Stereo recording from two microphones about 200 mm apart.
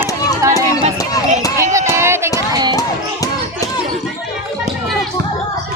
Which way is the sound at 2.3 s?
20° right (ahead or behind).